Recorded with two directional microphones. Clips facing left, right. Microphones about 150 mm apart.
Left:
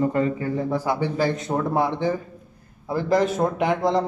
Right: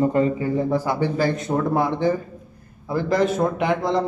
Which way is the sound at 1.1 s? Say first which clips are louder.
Right 1 dB; 25° left (ahead or behind).